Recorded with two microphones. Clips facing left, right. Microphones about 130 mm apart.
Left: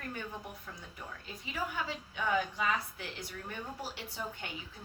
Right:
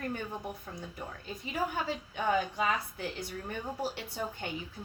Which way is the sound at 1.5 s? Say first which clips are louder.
Right 4 dB; 50° right (ahead or behind).